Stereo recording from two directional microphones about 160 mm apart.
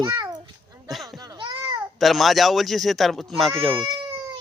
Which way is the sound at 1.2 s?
25° right (ahead or behind).